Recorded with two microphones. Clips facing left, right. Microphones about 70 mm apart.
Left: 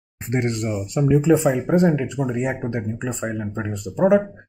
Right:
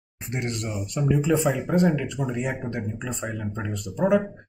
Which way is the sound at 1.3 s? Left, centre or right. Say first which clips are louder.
Left 5 dB; left.